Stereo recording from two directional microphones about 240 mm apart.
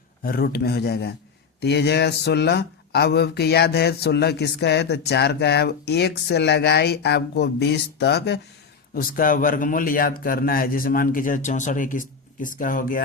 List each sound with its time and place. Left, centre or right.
0.2 s speech: left